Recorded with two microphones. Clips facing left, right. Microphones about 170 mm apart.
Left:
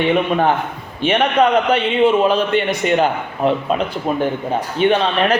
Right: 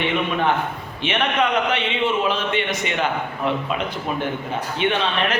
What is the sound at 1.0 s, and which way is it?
A man's voice, 35° left (ahead or behind).